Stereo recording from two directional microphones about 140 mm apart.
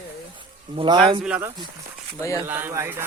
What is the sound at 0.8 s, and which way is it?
Speech, 35° right (ahead or behind).